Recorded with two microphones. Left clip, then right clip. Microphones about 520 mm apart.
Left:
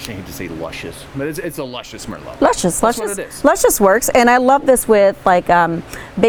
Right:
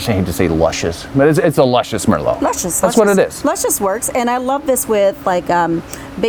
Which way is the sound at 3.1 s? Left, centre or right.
Right.